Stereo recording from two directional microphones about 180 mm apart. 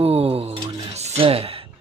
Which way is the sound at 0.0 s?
35° right (ahead or behind).